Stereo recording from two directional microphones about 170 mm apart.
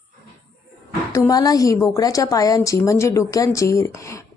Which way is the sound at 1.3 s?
20° left (ahead or behind).